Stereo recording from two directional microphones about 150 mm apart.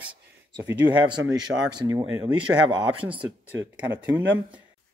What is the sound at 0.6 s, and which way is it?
Speech, 10° right (ahead or behind).